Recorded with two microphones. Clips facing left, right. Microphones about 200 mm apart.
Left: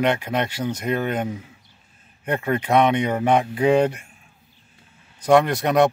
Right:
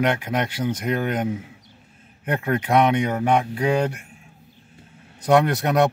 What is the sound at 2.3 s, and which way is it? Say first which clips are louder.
Speech: left 1 dB; centre (ahead or behind).